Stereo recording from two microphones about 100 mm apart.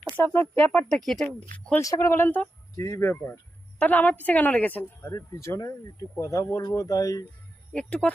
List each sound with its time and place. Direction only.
0.3 s a woman's voice: 15° left (ahead or behind)
0.9 s speech: 5° left (ahead or behind)
1.5 s a woman's voice: 15° left (ahead or behind)
1.8 s speech: 30° left (ahead or behind)
3.8 s a woman's voice: 15° left (ahead or behind)
5.1 s speech: 30° left (ahead or behind)
7.7 s a woman's voice: 10° left (ahead or behind)